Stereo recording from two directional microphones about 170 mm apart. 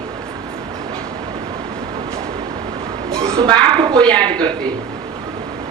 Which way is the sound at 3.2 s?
20° right (ahead or behind).